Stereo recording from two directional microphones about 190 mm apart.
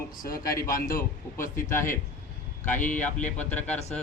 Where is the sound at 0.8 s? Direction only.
50° left (ahead or behind).